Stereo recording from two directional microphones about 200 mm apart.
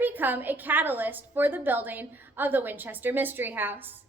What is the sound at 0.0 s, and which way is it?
A woman's voice, 10° right (ahead or behind).